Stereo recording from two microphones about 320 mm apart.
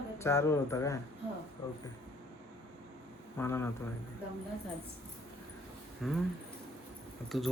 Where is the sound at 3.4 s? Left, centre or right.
Centre.